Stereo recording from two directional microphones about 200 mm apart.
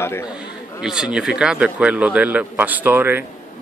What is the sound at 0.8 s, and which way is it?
Speech, 5° right (ahead or behind).